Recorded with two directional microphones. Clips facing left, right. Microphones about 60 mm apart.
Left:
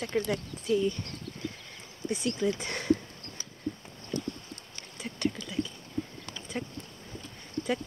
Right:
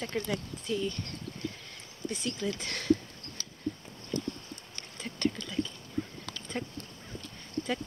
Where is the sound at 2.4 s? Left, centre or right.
Centre.